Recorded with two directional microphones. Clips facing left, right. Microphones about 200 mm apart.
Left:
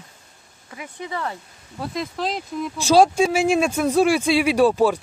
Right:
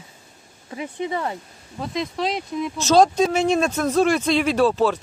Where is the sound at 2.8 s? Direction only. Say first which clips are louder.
Left 1 dB; 10° left (ahead or behind).